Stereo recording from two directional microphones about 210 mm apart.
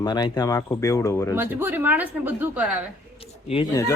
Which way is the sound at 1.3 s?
10° right (ahead or behind).